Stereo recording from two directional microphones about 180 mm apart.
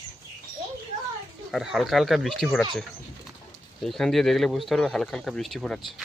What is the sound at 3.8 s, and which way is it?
Speech, centre (ahead or behind).